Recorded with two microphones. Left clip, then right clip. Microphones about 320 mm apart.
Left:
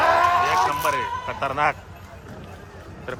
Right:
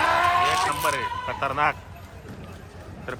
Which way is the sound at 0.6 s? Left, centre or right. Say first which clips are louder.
Left 2 dB; centre.